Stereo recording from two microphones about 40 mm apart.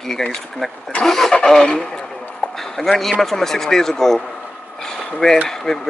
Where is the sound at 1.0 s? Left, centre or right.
Centre.